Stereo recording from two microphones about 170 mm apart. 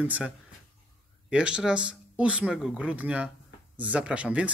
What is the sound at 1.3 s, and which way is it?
A man's voice, 5° right (ahead or behind).